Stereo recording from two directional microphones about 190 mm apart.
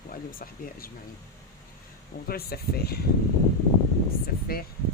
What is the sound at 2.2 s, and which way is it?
Speech, 55° left (ahead or behind).